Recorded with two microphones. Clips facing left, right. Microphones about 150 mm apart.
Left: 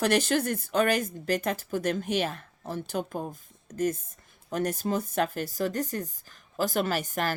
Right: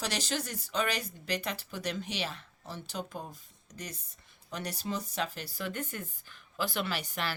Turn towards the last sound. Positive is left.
turn(degrees=45)  # may be behind; listen again after turning